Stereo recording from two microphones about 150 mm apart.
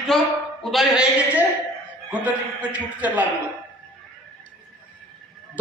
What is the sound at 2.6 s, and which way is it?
Speech, 10° right (ahead or behind).